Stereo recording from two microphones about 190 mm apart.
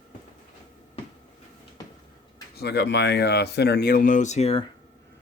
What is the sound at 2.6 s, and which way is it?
Speech, 60° left (ahead or behind).